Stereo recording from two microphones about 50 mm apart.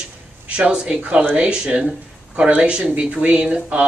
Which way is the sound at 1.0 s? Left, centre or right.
Right.